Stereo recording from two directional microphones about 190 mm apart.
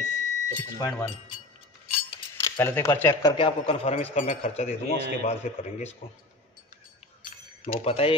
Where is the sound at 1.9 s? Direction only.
25° left (ahead or behind).